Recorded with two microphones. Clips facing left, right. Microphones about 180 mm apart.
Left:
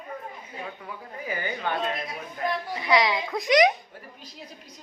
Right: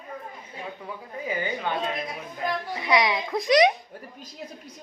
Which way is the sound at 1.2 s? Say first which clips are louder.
Right 2 dB; 20° right (ahead or behind).